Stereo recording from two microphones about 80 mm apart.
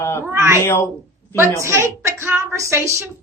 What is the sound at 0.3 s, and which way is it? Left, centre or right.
A woman's voice, right.